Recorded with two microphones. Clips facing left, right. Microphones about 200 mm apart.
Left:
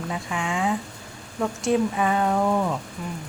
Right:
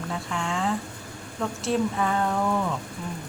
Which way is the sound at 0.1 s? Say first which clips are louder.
Left 1 dB; 15° left (ahead or behind).